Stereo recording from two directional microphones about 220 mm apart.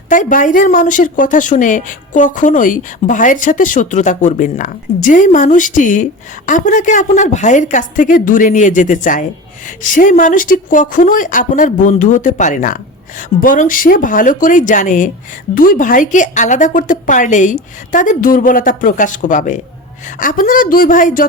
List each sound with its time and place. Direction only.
0.1 s speech: 35° left (ahead or behind)